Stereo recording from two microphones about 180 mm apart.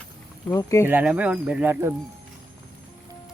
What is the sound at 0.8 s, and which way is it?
Speech, 10° right (ahead or behind).